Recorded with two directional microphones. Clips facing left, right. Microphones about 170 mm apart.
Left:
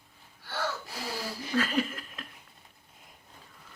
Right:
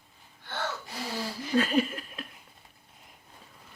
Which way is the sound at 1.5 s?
20° right (ahead or behind).